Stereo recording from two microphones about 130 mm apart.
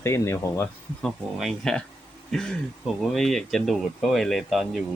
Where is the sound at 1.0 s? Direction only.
Centre (ahead or behind).